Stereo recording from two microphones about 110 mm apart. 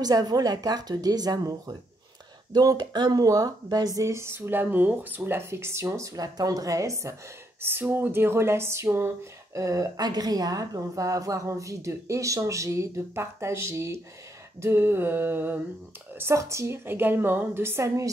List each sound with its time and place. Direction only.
0.0 s speech: 35° right (ahead or behind)